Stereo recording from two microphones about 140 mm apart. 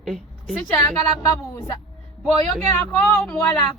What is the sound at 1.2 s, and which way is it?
Speech, 20° left (ahead or behind).